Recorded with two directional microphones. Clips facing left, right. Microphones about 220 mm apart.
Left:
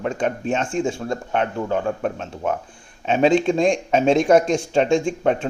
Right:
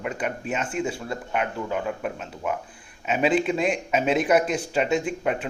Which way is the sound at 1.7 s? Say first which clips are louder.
Left 5 dB; 35° left (ahead or behind).